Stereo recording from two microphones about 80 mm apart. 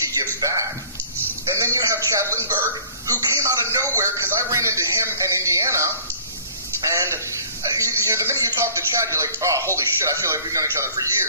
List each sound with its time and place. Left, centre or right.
0.4 s a sound: right
3.1 s a man's voice: right
6.9 s a man's voice: right